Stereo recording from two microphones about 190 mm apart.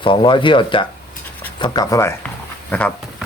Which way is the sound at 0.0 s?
25° left (ahead or behind).